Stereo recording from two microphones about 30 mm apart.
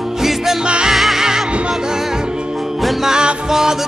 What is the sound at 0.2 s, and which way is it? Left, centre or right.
Music, centre.